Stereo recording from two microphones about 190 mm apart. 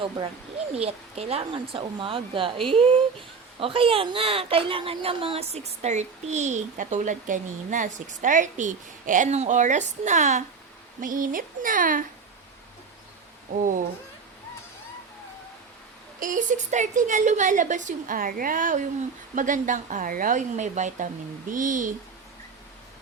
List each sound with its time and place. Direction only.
0.8 s speech: 30° right (ahead or behind)
13.5 s speech: 45° right (ahead or behind)
16.2 s speech: 40° right (ahead or behind)